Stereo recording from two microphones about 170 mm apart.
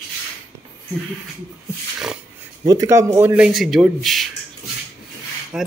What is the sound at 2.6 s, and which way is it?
Speech, 20° right (ahead or behind).